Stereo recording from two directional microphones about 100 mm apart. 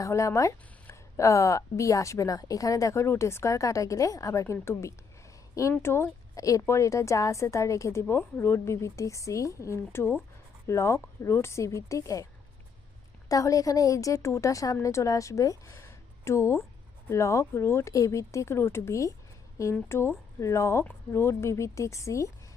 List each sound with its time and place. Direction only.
0.0 s speech: 30° left (ahead or behind)